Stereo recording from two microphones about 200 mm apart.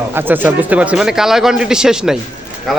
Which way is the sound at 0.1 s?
10° right (ahead or behind).